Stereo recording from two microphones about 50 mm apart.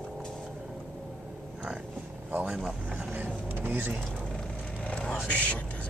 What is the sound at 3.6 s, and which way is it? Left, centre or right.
Speech, right.